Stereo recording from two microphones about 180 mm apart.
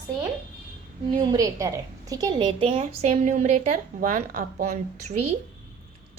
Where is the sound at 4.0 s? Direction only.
50° right (ahead or behind).